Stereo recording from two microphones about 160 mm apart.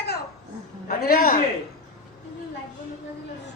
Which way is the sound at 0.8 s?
70° left (ahead or behind).